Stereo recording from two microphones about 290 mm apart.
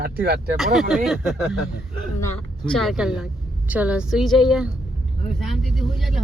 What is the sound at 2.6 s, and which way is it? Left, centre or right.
Speech, centre.